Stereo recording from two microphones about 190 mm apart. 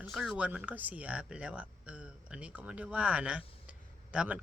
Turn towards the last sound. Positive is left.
turn(degrees=-5)  # may be behind; listen again after turning